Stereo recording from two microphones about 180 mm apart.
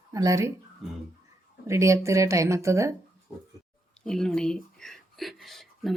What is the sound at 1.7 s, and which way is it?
Speech, 15° right (ahead or behind).